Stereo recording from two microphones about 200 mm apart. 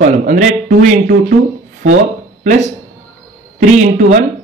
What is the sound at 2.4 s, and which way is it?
A man's voice, 40° right (ahead or behind).